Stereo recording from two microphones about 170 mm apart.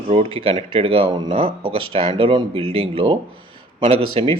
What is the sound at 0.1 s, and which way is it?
Speech, 35° right (ahead or behind).